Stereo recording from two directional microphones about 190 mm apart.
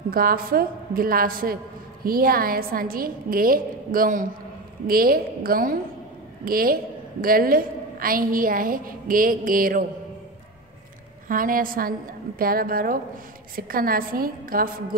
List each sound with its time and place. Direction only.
0.1 s a woman's voice: 50° right (ahead or behind)
11.2 s a woman's voice: 45° right (ahead or behind)